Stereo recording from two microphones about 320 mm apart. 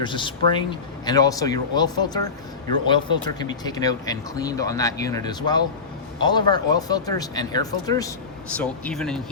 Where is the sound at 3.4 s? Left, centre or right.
Centre.